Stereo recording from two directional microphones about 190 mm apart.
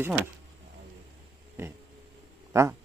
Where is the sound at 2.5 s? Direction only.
15° right (ahead or behind).